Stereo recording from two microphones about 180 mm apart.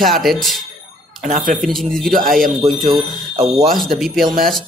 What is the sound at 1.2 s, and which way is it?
Speech, 45° right (ahead or behind).